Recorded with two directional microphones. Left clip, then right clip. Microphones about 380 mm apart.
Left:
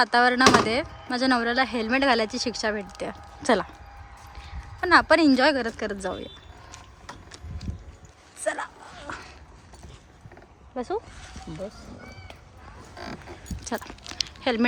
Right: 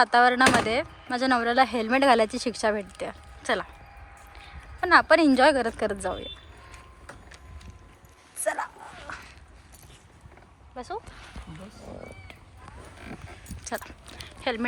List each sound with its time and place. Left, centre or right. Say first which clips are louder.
0.0 s speech: even; centre
4.8 s speech: even; centre
8.4 s a sound: even; centre
10.8 s speech: left 6 dB; centre
13.0 s a sound: left 8 dB; centre
14.4 s speech: left 4 dB; centre